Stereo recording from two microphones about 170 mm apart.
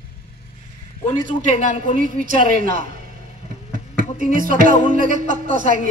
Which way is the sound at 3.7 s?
55° right (ahead or behind).